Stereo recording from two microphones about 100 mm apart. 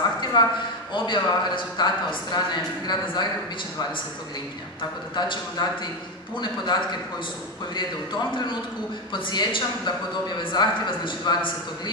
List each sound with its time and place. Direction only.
0.2 s a sound: 45° left (ahead or behind)
0.9 s a woman's voice: 50° left (ahead or behind)
5.1 s a woman's voice: 50° left (ahead or behind)
9.1 s a woman's voice: 50° left (ahead or behind)